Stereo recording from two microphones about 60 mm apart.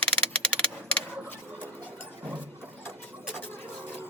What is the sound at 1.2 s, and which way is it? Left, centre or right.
Rodents, left.